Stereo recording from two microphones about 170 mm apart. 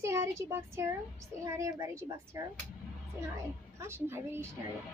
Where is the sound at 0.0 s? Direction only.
15° right (ahead or behind).